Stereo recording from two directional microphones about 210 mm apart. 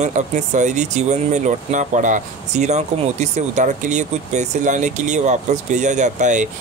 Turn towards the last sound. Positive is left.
turn(degrees=-35)  # may be behind; listen again after turning